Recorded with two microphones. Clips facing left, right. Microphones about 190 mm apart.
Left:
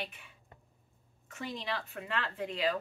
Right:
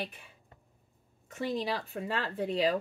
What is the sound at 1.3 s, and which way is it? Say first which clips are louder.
A woman's voice: right 6 dB; 35° right (ahead or behind).